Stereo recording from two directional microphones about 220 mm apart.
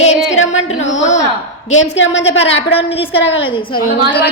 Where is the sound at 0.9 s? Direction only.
30° left (ahead or behind).